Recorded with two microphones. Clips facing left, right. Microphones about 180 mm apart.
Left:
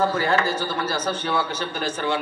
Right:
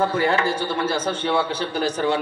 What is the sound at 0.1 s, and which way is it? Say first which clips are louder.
A man's voice: right 1 dB; 30° right (ahead or behind).